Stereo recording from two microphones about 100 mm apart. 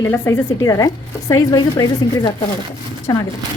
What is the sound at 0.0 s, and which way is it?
Speech, 30° left (ahead or behind).